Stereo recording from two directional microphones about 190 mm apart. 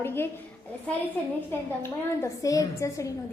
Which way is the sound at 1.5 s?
15° left (ahead or behind).